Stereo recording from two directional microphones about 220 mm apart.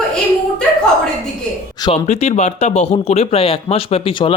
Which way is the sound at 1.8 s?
30° left (ahead or behind).